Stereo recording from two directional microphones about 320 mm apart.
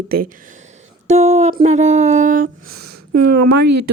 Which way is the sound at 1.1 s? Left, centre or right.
Centre.